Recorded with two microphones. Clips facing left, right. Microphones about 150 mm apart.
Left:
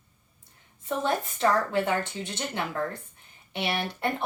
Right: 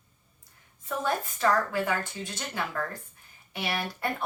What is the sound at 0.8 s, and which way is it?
A woman's voice, 25° left (ahead or behind).